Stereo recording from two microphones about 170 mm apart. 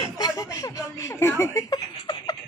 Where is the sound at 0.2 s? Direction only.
25° left (ahead or behind).